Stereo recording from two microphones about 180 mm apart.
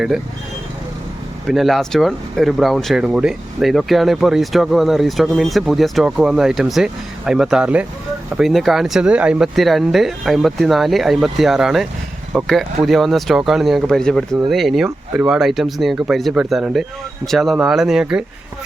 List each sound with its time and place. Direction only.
1.5 s speech: centre (ahead or behind)